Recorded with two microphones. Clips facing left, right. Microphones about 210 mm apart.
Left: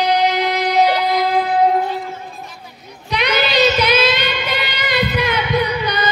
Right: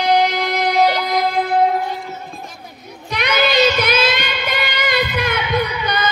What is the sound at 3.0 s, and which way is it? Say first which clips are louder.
Child singing: even; 50° right (ahead or behind).